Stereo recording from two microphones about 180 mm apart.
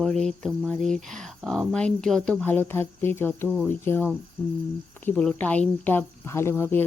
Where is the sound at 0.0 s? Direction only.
Centre (ahead or behind).